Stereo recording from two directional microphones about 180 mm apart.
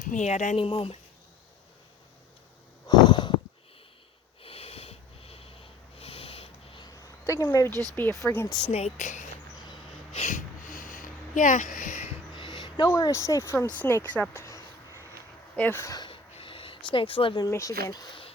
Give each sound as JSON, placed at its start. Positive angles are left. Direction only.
{"t": 0.0, "sound": "speech", "side_deg": 45}
{"t": 2.8, "sound": "a sound", "side_deg": 25}
{"t": 4.4, "sound": "wheeze", "side_deg": 35}
{"t": 6.0, "sound": "a sound", "side_deg": 30}
{"t": 7.3, "sound": "speech", "side_deg": 20}
{"t": 7.7, "sound": "speech", "side_deg": -20}
{"t": 7.9, "sound": "speech", "side_deg": 10}
{"t": 8.7, "sound": "speech", "side_deg": 40}
{"t": 10.2, "sound": "a sound", "side_deg": 45}
{"t": 12.4, "sound": "speech", "side_deg": 25}
{"t": 15.5, "sound": "a sound", "side_deg": 10}
{"t": 17.5, "sound": "speech", "side_deg": 15}